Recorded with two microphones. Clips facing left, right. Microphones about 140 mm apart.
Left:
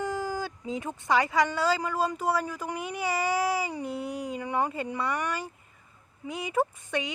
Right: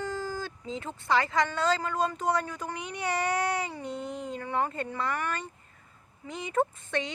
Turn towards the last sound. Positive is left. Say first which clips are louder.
# left 1 dB
turn(degrees=10)  # may be behind; listen again after turning